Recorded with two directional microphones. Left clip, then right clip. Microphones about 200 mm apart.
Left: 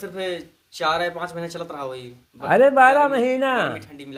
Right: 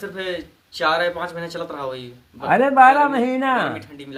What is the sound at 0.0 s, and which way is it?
Speech, 45° left (ahead or behind).